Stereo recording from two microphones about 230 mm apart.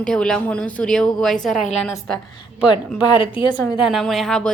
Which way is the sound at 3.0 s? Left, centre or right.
Left.